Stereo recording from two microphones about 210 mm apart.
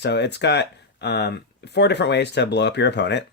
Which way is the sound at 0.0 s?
55° left (ahead or behind).